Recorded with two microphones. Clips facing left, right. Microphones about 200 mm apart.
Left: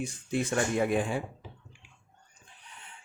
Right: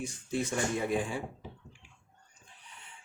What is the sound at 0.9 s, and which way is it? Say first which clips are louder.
Speech: left 3 dB; 60° left (ahead or behind).